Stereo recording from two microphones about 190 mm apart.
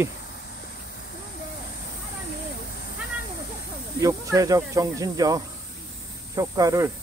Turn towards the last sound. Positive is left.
turn(degrees=-15)  # may be behind; listen again after turning